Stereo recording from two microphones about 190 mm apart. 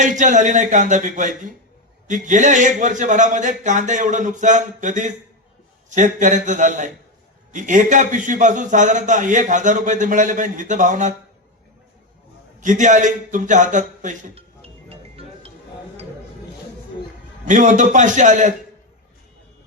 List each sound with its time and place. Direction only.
0.0 s a man's voice: 40° right (ahead or behind)
12.5 s a sound: 40° right (ahead or behind)
17.4 s a man's voice: 40° right (ahead or behind)